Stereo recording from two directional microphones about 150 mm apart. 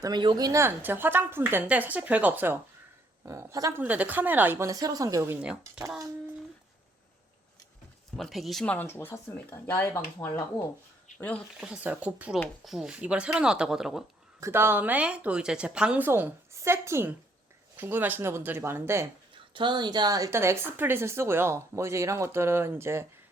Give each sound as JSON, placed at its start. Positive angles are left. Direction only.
{"t": 0.0, "sound": "a woman's voice", "side_deg": -30}
{"t": 5.4, "sound": "speech", "side_deg": -5}
{"t": 8.1, "sound": "speech", "side_deg": 0}
{"t": 11.6, "sound": "a woman's voice", "side_deg": -5}
{"t": 14.4, "sound": "a woman's voice", "side_deg": -15}
{"t": 19.5, "sound": "a woman's voice", "side_deg": -30}